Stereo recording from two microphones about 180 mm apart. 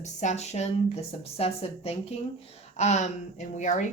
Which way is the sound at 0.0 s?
40° left (ahead or behind).